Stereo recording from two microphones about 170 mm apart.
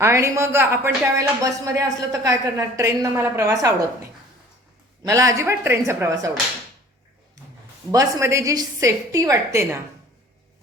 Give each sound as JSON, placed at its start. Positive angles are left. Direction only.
{"t": 0.0, "sound": "speech", "side_deg": -15}
{"t": 5.0, "sound": "speech", "side_deg": -20}
{"t": 7.4, "sound": "a sound", "side_deg": -20}
{"t": 7.9, "sound": "a woman's voice", "side_deg": -20}